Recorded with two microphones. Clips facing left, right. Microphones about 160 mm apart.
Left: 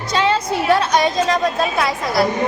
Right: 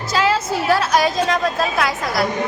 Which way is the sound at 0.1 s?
5° right (ahead or behind).